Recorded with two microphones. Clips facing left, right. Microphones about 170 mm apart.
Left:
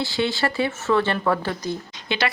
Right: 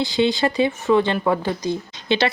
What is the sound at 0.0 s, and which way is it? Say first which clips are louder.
Speech: right 4 dB; 20° right (ahead or behind).